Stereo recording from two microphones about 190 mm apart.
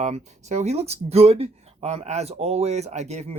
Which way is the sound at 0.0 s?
35° right (ahead or behind).